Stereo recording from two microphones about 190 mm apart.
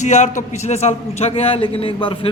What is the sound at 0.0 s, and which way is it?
A man's voice, 40° left (ahead or behind).